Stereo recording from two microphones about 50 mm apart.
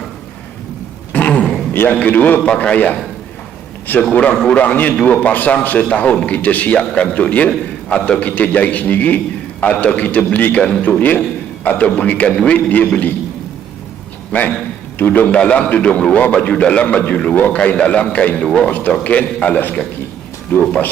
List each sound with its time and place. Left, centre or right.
1.1 s a sound: left
1.9 s a man's voice: left
4.1 s a man's voice: left
10.6 s a man's voice: left
11.6 s a man's voice: left
14.3 s a man's voice: left
18.4 s speech: centre
18.7 s a man's voice: left